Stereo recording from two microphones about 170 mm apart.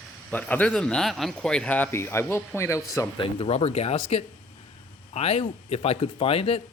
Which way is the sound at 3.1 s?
30° left (ahead or behind).